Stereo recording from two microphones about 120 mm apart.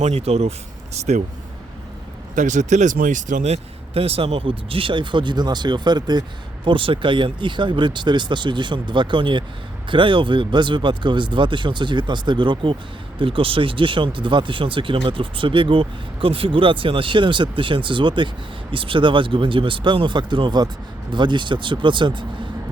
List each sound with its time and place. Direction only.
0.0 s speech: 60° right (ahead or behind)
2.3 s speech: 90° right; by 6.2 s 35° right (ahead or behind)
6.7 s speech: 45° right (ahead or behind)